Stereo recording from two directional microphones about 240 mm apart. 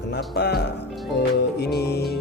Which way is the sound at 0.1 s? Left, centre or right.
Left.